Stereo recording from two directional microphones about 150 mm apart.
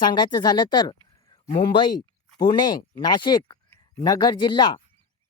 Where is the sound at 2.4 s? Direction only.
30° left (ahead or behind).